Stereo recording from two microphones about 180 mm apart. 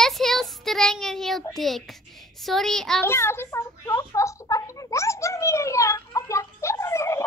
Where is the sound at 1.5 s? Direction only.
Centre (ahead or behind).